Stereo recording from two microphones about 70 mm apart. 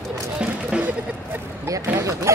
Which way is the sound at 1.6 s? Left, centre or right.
Right.